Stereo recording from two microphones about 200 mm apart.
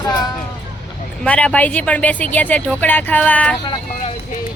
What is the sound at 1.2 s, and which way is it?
Speech, 5° left (ahead or behind).